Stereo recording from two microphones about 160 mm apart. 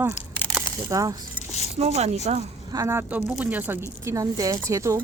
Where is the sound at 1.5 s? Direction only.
45° left (ahead or behind).